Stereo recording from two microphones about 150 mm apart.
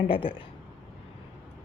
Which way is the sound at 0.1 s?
35° left (ahead or behind).